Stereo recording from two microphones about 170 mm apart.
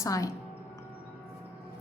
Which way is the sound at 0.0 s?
20° left (ahead or behind).